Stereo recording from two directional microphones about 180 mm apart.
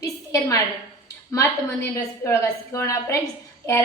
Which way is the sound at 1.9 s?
15° left (ahead or behind).